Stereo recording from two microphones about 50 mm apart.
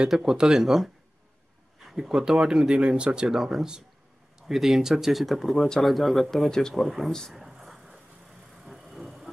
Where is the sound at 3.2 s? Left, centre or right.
Centre.